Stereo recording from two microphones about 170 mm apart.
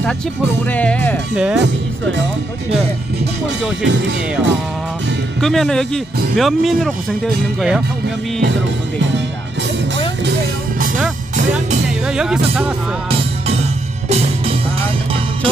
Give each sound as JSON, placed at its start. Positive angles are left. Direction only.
{"t": 0.7, "sound": "speech", "side_deg": 10}
{"t": 1.3, "sound": "speech", "side_deg": -5}
{"t": 1.6, "sound": "speech", "side_deg": -90}
{"t": 3.8, "sound": "speech", "side_deg": -90}
{"t": 5.4, "sound": "speech", "side_deg": 0}
{"t": 12.1, "sound": "speech", "side_deg": -5}
{"t": 14.0, "sound": "music", "side_deg": -40}